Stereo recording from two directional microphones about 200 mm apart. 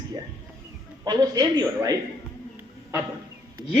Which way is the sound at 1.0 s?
20° right (ahead or behind).